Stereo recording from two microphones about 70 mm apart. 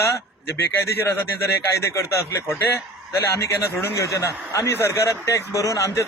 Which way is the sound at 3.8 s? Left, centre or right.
Left.